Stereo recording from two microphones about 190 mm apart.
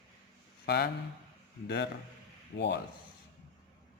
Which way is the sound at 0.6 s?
55° left (ahead or behind).